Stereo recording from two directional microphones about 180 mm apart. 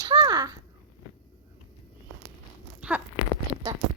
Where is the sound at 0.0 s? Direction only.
25° right (ahead or behind).